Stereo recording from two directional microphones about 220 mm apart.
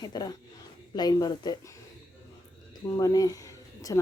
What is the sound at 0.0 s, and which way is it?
Speech, 20° left (ahead or behind).